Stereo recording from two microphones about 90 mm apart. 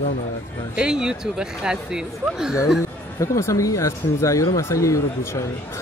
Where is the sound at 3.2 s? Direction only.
35° left (ahead or behind).